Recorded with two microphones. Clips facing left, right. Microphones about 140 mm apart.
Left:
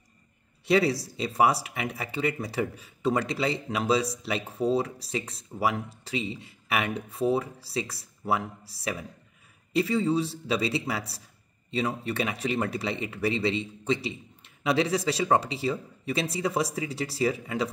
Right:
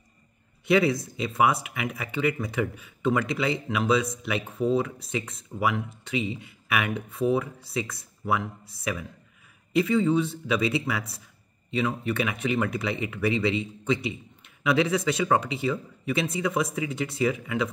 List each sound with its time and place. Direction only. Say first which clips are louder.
0.7 s speech: right 1 dB; 35° left (ahead or behind)